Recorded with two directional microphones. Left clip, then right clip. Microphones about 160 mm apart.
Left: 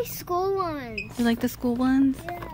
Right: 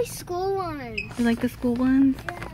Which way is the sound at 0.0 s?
55° left (ahead or behind).